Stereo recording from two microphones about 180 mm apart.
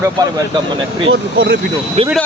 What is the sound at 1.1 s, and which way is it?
Speech, 70° right (ahead or behind).